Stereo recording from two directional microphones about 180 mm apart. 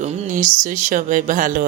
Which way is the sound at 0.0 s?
40° right (ahead or behind).